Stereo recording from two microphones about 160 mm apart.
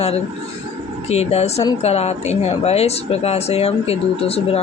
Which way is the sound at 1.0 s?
40° left (ahead or behind).